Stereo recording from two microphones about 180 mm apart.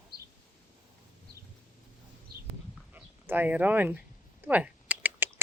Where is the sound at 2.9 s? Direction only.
10° right (ahead or behind).